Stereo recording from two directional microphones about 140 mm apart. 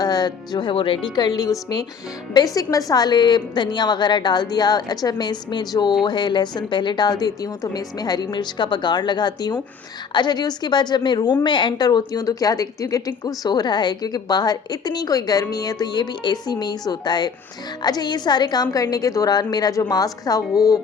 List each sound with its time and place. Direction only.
0.0 s a woman's voice: 30° left (ahead or behind)